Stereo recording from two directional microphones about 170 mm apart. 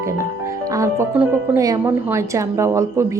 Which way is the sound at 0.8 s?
15° right (ahead or behind).